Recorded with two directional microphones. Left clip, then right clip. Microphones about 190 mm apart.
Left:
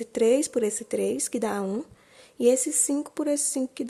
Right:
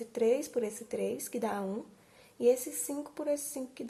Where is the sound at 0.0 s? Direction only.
45° left (ahead or behind).